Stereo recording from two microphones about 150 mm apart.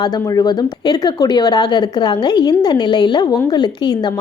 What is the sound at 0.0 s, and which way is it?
Speech, 25° left (ahead or behind).